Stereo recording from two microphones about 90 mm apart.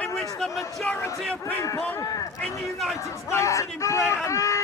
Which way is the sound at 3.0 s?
35° left (ahead or behind).